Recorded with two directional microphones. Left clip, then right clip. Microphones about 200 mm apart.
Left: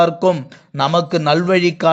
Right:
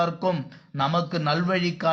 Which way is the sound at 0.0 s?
35° left (ahead or behind).